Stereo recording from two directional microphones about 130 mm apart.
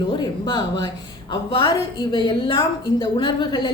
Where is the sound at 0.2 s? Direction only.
40° left (ahead or behind).